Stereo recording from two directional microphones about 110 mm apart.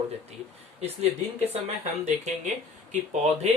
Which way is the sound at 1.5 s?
70° right (ahead or behind).